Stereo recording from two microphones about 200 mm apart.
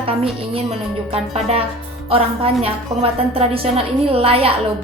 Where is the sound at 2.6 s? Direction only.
30° right (ahead or behind).